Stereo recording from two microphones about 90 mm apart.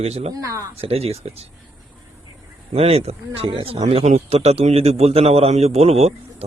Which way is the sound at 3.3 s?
90° right.